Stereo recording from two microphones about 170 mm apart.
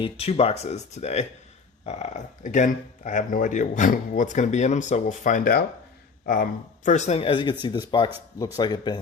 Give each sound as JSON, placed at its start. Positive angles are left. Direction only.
{"t": 0.0, "sound": "speech", "side_deg": 35}